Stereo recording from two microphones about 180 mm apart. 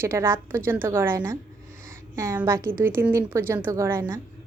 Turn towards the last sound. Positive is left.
turn(degrees=-15)  # may be behind; listen again after turning